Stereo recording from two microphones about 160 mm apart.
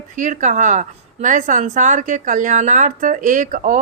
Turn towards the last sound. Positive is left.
turn(degrees=-55)  # may be behind; listen again after turning